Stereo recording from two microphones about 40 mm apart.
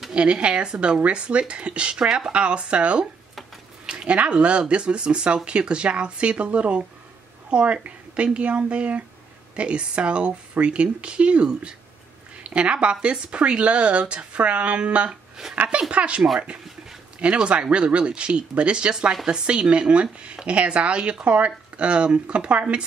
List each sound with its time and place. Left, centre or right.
0.1 s speech: right
2.3 s speech: right
17.2 s speech: right